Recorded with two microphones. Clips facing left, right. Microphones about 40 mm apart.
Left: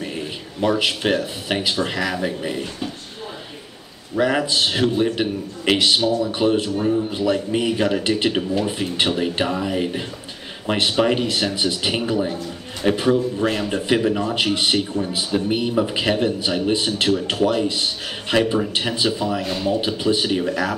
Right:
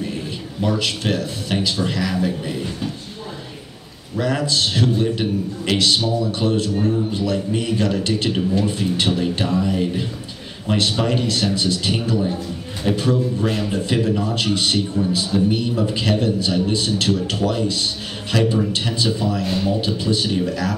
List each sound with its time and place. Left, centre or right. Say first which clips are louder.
0.0 s speech: right 1 dB; left
4.2 s a man's voice: left 2 dB; left; by 19.7 s centre
19.7 s a man's voice: left 1 dB; left